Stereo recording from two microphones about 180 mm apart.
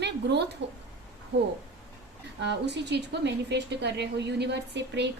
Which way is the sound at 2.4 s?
70° right (ahead or behind).